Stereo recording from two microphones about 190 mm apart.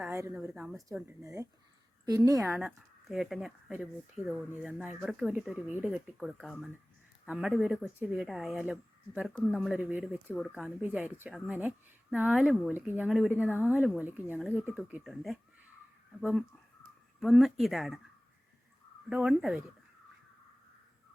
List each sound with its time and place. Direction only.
0.0 s speech: 10° right (ahead or behind)
1.0 s speech: 15° right (ahead or behind)
2.6 s speech: centre (ahead or behind)
17.2 s speech: centre (ahead or behind)
19.0 s speech: 5° right (ahead or behind)